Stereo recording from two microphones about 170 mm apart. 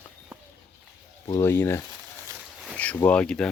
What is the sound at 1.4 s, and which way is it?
Speech, 15° left (ahead or behind).